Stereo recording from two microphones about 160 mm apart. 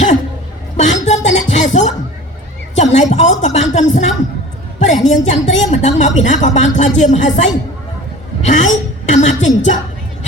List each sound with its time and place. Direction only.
0.8 s music: 50° left (ahead or behind)
2.7 s a woman's voice: 45° left (ahead or behind)
9.0 s a woman's voice: 50° left (ahead or behind)